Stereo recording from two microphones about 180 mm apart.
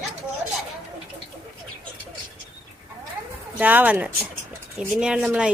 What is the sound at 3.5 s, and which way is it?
A woman's voice, 10° right (ahead or behind).